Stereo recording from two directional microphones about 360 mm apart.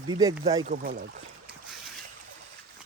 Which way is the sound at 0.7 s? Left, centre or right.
Right.